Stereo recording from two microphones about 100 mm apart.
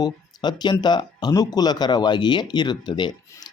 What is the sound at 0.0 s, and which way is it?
Speech, 45° left (ahead or behind).